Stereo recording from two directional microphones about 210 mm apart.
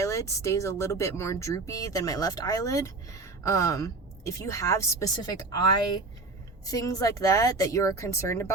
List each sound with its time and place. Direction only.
0.0 s speech: 15° left (ahead or behind)